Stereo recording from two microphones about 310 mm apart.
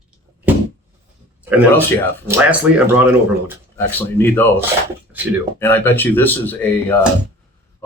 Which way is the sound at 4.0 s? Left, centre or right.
Centre.